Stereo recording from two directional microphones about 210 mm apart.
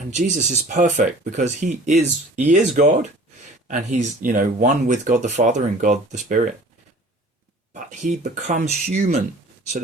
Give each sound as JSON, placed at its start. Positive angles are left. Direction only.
{"t": 0.1, "sound": "speech", "side_deg": -35}
{"t": 7.7, "sound": "speech", "side_deg": -35}